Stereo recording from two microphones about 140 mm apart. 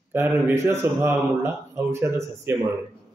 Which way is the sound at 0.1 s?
15° right (ahead or behind).